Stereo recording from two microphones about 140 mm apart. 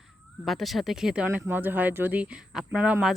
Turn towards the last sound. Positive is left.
turn(degrees=-5)  # may be behind; listen again after turning